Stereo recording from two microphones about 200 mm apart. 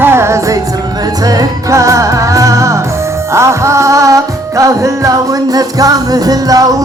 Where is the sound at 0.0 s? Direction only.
15° right (ahead or behind).